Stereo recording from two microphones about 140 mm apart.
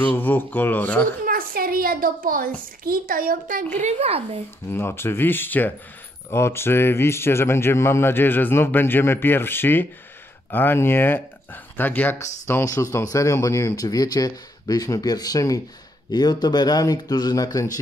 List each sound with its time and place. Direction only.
0.0 s speech: 10° left (ahead or behind)
1.2 s a sound: 90° right
2.8 s a child's voice: 90° right
3.7 s speech: 50° right (ahead or behind)
4.6 s speech: 15° left (ahead or behind)